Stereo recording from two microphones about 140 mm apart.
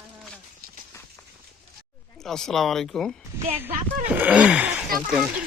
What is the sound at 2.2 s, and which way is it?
Speech, 5° left (ahead or behind).